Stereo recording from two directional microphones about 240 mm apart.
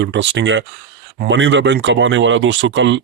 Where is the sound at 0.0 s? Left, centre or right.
Right.